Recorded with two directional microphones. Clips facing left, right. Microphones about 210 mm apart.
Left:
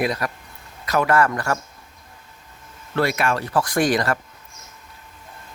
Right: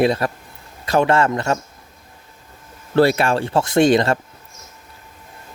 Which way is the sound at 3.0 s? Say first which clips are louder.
Right 6 dB; 30° right (ahead or behind).